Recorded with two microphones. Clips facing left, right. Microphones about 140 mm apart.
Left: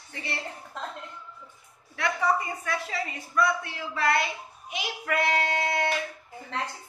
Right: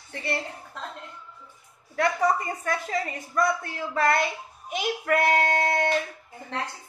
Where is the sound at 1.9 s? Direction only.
45° right (ahead or behind).